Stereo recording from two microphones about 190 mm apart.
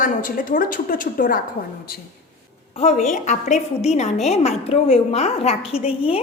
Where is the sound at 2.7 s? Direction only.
35° left (ahead or behind).